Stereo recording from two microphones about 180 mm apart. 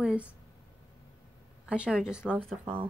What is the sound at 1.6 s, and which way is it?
Speech, 5° right (ahead or behind).